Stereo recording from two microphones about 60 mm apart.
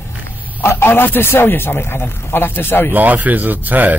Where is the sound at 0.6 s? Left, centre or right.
Left.